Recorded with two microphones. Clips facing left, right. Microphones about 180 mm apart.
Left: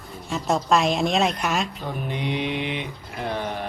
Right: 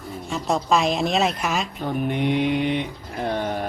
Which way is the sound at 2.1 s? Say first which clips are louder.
Right 5 dB; 50° right (ahead or behind).